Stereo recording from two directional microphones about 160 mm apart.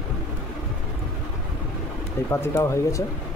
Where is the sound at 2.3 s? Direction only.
15° left (ahead or behind).